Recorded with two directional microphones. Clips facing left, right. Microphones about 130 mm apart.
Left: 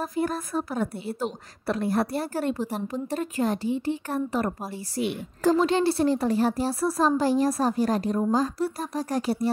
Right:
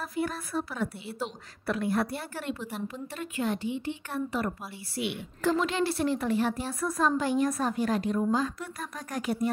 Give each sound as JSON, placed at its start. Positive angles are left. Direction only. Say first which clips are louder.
{"t": 0.0, "sound": "a woman's voice", "louder": "left 5 dB", "side_deg": 40}